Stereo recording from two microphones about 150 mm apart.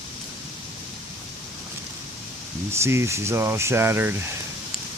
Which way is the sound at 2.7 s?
20° right (ahead or behind).